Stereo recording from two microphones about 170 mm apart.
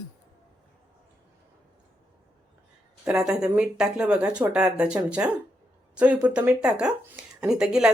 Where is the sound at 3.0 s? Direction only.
5° right (ahead or behind).